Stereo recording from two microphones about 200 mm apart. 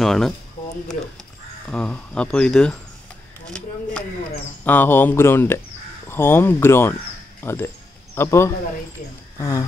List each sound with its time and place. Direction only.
0.0 s speech: centre (ahead or behind)
1.7 s speech: 5° left (ahead or behind)
3.4 s a sound: 5° left (ahead or behind)
4.6 s speech: 10° left (ahead or behind)